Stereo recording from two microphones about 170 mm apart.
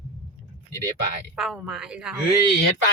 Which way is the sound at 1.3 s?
Centre (ahead or behind).